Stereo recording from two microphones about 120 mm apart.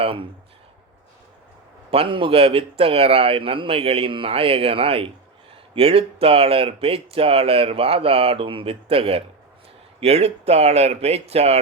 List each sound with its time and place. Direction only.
0.0 s speech: 45° right (ahead or behind)
1.9 s speech: 50° right (ahead or behind)